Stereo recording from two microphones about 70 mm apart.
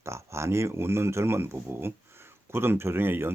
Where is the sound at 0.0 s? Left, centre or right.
Right.